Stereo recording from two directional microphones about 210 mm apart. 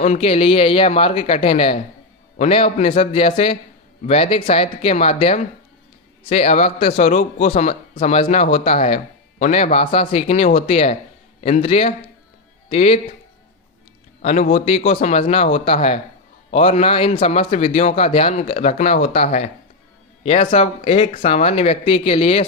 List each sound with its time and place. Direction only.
0.0 s a man's voice: 30° left (ahead or behind)
14.2 s a man's voice: 35° left (ahead or behind)